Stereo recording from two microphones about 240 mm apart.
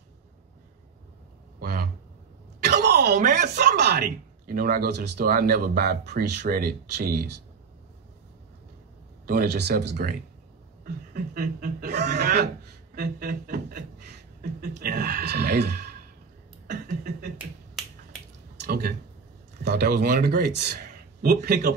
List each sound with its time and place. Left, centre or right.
1.6 s a man's voice: right
9.2 s speech: right
12.9 s a sound: right
14.8 s speech: right
16.6 s a sound: right
18.7 s speech: right